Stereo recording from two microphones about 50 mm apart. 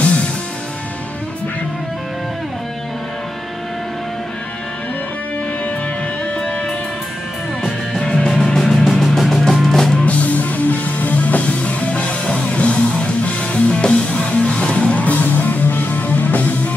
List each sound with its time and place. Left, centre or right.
0.0 s music: left
6.3 s music: centre
8.0 s music: centre
10.0 s music: left